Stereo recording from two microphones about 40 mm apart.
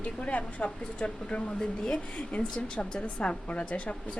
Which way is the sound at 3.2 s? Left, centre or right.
Left.